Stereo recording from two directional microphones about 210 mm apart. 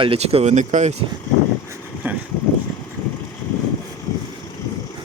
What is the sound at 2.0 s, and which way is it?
Vehicle, 10° right (ahead or behind).